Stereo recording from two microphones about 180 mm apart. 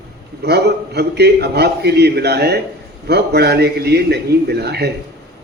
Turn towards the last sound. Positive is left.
turn(degrees=-65)  # may be behind; listen again after turning